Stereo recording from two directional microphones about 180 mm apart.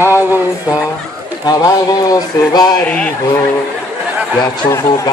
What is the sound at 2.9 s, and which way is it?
Speech, 5° left (ahead or behind).